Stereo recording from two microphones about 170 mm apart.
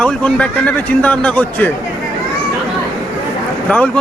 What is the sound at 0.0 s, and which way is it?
A man's voice, 5° left (ahead or behind).